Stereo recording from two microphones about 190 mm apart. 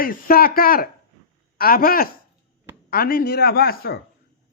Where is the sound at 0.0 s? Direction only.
50° left (ahead or behind).